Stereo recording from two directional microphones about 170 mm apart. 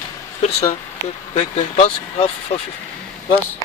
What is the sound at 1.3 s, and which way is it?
Speech, 40° left (ahead or behind).